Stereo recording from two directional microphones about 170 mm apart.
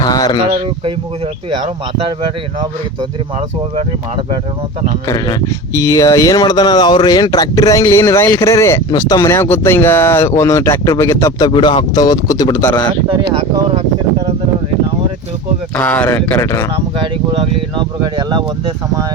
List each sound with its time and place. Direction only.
0.0 s a sound: 25° left (ahead or behind)
1.5 s speech: 30° right (ahead or behind)
5.0 s speech: 20° left (ahead or behind)
15.7 s speech: 10° left (ahead or behind)